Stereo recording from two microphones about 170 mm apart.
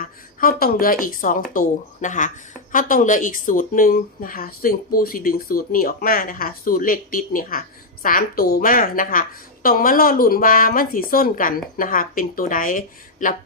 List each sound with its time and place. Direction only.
0.0 s speech: 60° left (ahead or behind)